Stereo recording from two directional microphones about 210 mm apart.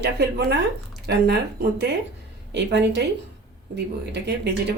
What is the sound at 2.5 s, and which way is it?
A woman's voice, 55° right (ahead or behind).